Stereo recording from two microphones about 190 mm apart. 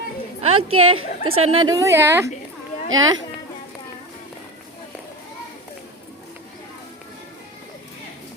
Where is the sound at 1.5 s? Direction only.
20° right (ahead or behind).